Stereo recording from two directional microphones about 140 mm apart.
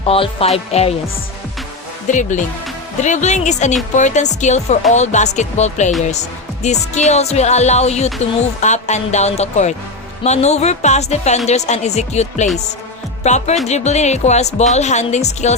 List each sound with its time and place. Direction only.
0.0 s speech: 40° left (ahead or behind)
2.0 s speech: 60° left (ahead or behind)